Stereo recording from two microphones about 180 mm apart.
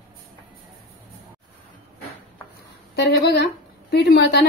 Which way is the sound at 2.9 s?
65° left (ahead or behind).